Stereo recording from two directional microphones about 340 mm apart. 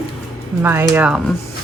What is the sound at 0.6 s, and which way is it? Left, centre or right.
Speech, centre.